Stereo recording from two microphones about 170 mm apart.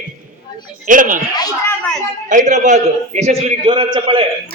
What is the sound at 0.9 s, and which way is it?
Speech, 50° right (ahead or behind).